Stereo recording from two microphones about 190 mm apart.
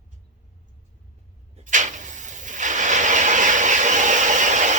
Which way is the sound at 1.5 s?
40° right (ahead or behind).